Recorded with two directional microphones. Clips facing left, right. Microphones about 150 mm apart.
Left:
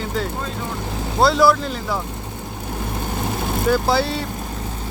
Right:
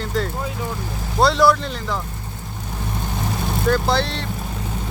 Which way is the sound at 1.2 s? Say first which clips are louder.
Even; centre (ahead or behind).